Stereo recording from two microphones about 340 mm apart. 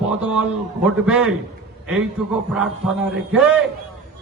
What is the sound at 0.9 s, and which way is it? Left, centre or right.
Speech, centre.